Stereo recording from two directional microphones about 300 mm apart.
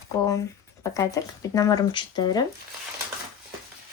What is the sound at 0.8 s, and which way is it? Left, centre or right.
Speech, centre.